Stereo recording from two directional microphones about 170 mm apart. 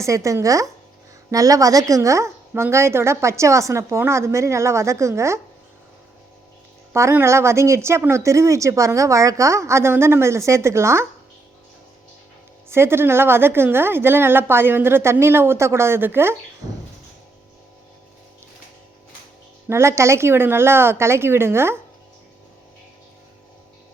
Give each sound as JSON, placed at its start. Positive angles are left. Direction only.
{"t": 0.0, "sound": "a woman's voice", "side_deg": -20}
{"t": 6.9, "sound": "a woman's voice", "side_deg": -15}
{"t": 12.6, "sound": "a woman's voice", "side_deg": -15}
{"t": 19.6, "sound": "a woman's voice", "side_deg": -15}